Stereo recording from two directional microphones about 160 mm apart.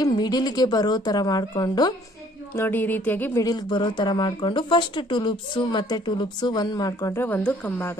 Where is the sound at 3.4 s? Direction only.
25° left (ahead or behind).